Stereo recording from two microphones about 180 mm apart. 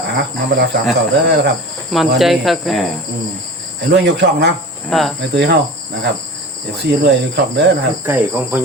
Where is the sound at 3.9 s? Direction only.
70° right (ahead or behind).